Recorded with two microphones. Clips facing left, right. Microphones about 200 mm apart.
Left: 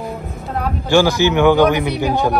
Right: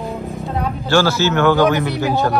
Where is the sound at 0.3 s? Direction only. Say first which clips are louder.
Even; centre (ahead or behind).